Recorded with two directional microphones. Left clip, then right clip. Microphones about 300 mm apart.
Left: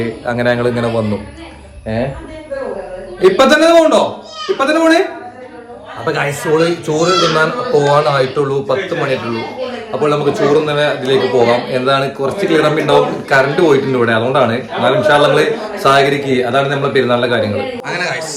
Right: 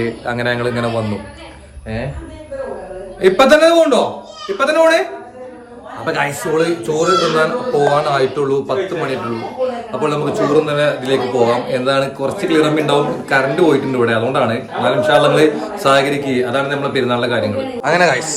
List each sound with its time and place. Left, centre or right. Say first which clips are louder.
0.0 s a man's voice: left 3 dB; centre
3.2 s a man's voice: left 1 dB; centre
6.1 s a man's voice: left 3 dB; centre